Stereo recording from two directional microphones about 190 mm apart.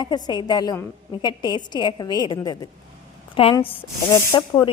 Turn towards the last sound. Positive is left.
turn(degrees=25)  # may be behind; listen again after turning